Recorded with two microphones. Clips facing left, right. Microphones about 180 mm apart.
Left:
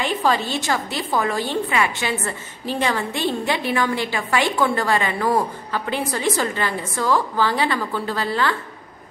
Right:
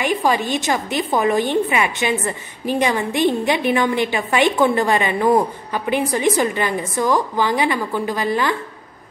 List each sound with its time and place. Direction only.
0.0 s a woman's voice: 15° right (ahead or behind)